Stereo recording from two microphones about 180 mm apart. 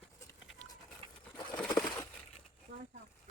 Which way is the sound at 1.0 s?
30° right (ahead or behind).